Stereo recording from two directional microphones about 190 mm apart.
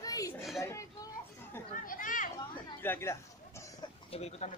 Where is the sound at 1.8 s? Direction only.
45° left (ahead or behind).